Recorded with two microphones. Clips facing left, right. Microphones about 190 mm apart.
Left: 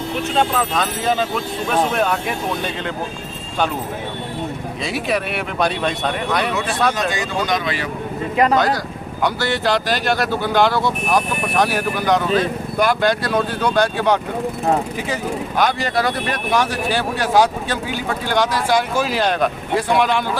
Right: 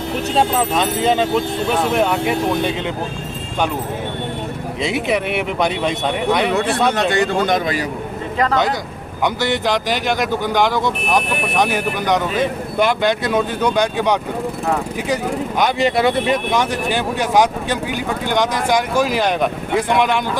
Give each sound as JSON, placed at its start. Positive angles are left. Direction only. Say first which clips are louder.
{"t": 0.3, "sound": "speech", "louder": "right 2 dB", "side_deg": -20}
{"t": 4.8, "sound": "speech", "louder": "right 3 dB", "side_deg": -20}
{"t": 6.5, "sound": "speech", "louder": "right 3 dB", "side_deg": -65}
{"t": 8.5, "sound": "speech", "louder": "left 1 dB", "side_deg": -20}